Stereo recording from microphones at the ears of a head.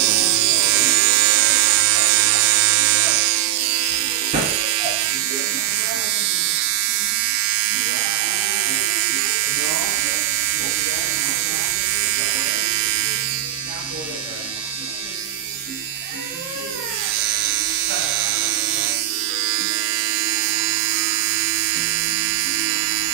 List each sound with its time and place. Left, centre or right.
0.0 s electric shaver: right
7.3 s electric shaver: right
12.2 s electric shaver: right
17.2 s electric shaver: right
20.2 s electric toothbrush: right